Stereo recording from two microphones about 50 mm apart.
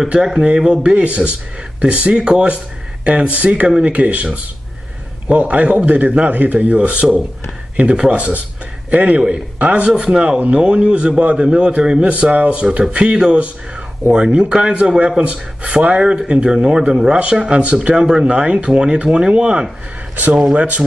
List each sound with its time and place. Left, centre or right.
0.2 s speech: centre
5.3 s speech: right
8.9 s a man's voice: right